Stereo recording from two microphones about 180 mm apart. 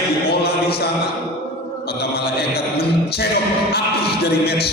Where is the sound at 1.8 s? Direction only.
60° left (ahead or behind).